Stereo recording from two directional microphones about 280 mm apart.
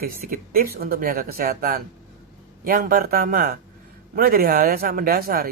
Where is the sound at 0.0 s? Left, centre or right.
Right.